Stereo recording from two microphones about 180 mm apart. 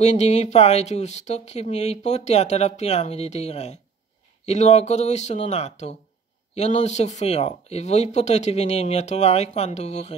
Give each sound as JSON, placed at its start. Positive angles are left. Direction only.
{"t": 0.0, "sound": "speech", "side_deg": 40}